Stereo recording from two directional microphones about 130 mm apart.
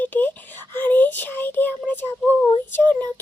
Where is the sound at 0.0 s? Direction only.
15° left (ahead or behind).